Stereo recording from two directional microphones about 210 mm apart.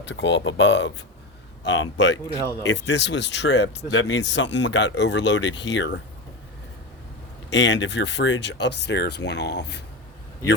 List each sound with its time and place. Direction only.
0.0 s speech: 60° left (ahead or behind)
7.5 s speech: 60° left (ahead or behind)